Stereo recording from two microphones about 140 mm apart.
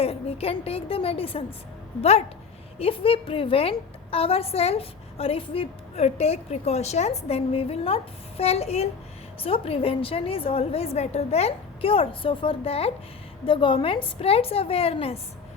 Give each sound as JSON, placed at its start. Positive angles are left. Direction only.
{"t": 0.0, "sound": "a woman's voice", "side_deg": 45}